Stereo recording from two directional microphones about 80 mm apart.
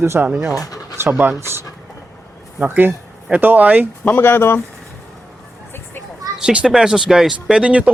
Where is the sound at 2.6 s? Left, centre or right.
Right.